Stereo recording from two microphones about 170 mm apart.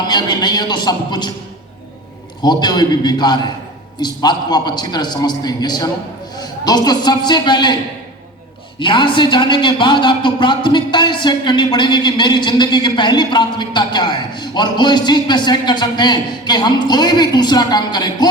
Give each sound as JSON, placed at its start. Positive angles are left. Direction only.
{"t": 0.1, "sound": "speech", "side_deg": 25}
{"t": 2.4, "sound": "a man's voice", "side_deg": 25}
{"t": 8.8, "sound": "speech", "side_deg": 30}